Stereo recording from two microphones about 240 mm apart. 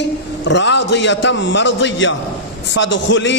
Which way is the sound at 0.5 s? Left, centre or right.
Left.